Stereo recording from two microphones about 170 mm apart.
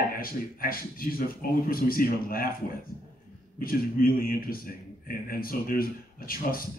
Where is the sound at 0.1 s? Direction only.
60° left (ahead or behind).